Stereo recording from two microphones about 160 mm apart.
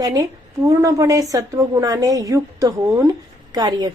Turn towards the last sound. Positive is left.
turn(degrees=-25)  # may be behind; listen again after turning